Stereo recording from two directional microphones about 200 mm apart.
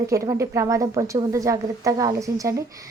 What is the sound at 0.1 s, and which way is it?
Speech, 15° right (ahead or behind).